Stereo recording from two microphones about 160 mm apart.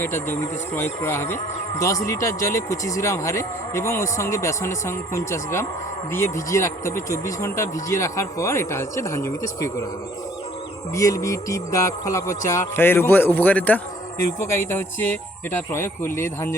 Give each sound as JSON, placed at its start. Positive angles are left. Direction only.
{"t": 0.0, "sound": "speech", "side_deg": 15}
{"t": 10.9, "sound": "speech", "side_deg": 20}